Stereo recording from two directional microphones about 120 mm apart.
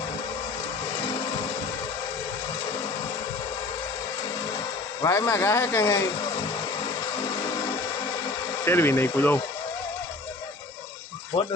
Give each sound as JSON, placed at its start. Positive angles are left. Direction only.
{"t": 5.0, "sound": "speech", "side_deg": 20}
{"t": 8.6, "sound": "speech", "side_deg": 20}
{"t": 11.3, "sound": "speech", "side_deg": 50}